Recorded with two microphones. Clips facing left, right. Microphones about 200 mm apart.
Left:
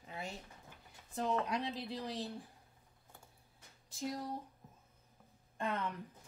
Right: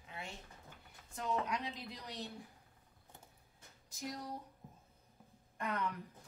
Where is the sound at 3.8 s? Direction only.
30° left (ahead or behind).